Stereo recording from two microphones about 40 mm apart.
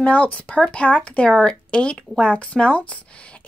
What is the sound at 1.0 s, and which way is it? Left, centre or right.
Speech, left.